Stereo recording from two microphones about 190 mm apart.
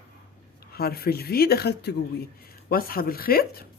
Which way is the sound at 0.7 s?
55° left (ahead or behind).